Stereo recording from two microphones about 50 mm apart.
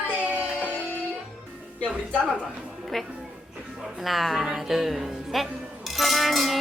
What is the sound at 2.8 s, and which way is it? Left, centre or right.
Music, centre.